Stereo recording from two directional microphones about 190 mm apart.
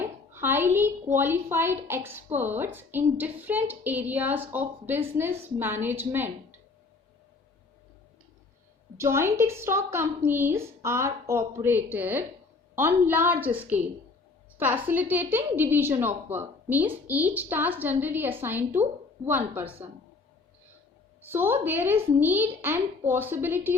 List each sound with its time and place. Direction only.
0.0 s a woman's voice: 10° right (ahead or behind)
9.0 s a woman's voice: 15° right (ahead or behind)
14.8 s a woman's voice: 10° right (ahead or behind)
21.2 s a woman's voice: 10° right (ahead or behind)